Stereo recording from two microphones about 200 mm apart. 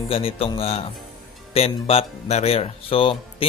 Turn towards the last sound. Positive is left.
turn(degrees=25)  # may be behind; listen again after turning